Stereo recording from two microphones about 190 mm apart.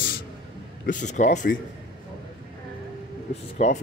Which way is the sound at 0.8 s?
40° left (ahead or behind).